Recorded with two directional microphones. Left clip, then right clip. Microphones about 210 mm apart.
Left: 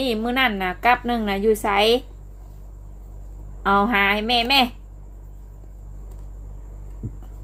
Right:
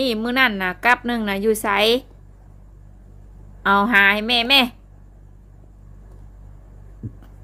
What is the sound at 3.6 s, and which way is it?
A woman's voice, 25° right (ahead or behind).